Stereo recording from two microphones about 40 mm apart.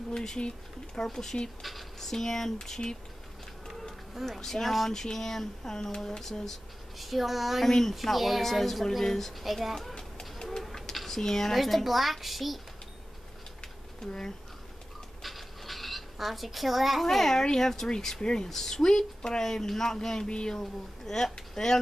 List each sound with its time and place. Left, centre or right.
0.1 s speech: centre
1.6 s speech: centre
3.6 s insect: centre
4.3 s speech: centre
7.0 s speech: centre
7.6 s speech: centre
9.8 s a sound: centre
11.0 s speech: centre
11.5 s speech: centre
14.0 s speech: centre
15.2 s a sound: centre
17.5 s speech: centre
20.2 s speech: left
20.5 s speech: centre